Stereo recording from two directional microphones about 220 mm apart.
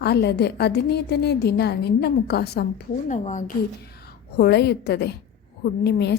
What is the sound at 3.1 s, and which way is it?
Speech, 35° left (ahead or behind).